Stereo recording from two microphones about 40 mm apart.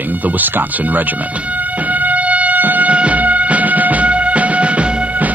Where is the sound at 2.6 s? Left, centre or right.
Right.